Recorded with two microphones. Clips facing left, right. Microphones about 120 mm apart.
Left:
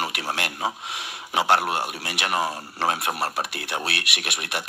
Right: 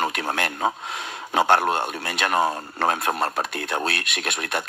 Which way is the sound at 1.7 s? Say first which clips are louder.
Right 3 dB; 10° left (ahead or behind).